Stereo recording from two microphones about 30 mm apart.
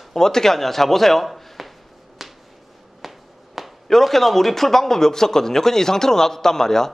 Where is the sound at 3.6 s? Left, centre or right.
Centre.